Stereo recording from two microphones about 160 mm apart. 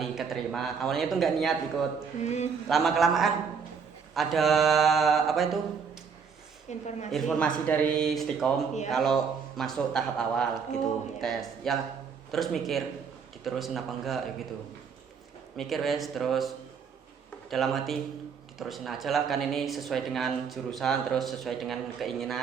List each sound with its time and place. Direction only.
0.0 s speech: centre (ahead or behind)
2.2 s a woman's voice: 45° left (ahead or behind)
2.6 s speech: centre (ahead or behind)
6.7 s a woman's voice: 45° left (ahead or behind)
7.1 s speech: centre (ahead or behind)
15.5 s speech: centre (ahead or behind)
17.5 s speech: centre (ahead or behind)